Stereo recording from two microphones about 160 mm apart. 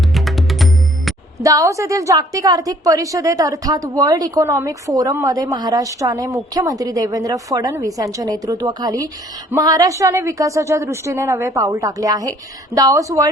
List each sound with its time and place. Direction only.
0.1 s music: centre (ahead or behind)
1.4 s a woman's voice: 20° right (ahead or behind)